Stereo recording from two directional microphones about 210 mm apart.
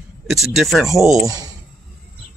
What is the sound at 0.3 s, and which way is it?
Speech, centre (ahead or behind).